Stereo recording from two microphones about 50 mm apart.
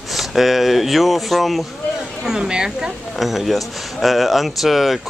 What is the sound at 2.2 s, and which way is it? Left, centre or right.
Speech, centre.